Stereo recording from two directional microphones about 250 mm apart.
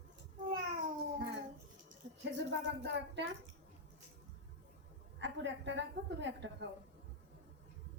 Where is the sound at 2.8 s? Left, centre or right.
Right.